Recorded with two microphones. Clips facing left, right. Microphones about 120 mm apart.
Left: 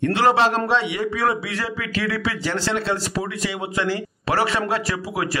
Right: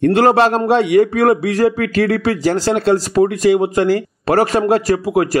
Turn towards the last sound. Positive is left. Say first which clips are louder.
# right 10 dB
turn(degrees=-45)  # may be behind; listen again after turning